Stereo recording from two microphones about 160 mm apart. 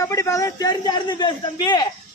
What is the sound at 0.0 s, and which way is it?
A man's voice, 20° left (ahead or behind).